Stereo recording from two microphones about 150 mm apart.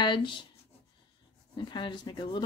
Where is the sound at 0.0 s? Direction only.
30° left (ahead or behind).